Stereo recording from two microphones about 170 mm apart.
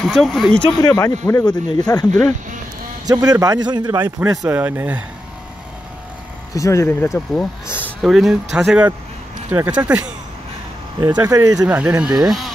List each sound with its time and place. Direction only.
0.1 s speech: centre (ahead or behind)
0.9 s speech: 20° left (ahead or behind)
3.1 s a man's voice: 20° right (ahead or behind)
6.5 s speech: 20° left (ahead or behind)
8.0 s a man's voice: centre (ahead or behind)
11.2 s a man's voice: 20° right (ahead or behind)
11.6 s speech: 5° right (ahead or behind)